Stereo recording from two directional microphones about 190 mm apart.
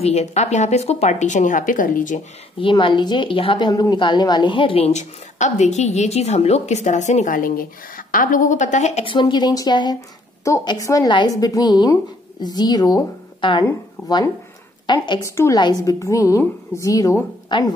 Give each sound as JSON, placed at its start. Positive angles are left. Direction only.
{"t": 0.0, "sound": "a woman's voice", "side_deg": 35}
{"t": 2.6, "sound": "a woman's voice", "side_deg": 25}